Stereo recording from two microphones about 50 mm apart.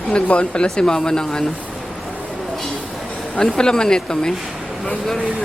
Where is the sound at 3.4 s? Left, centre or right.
Centre.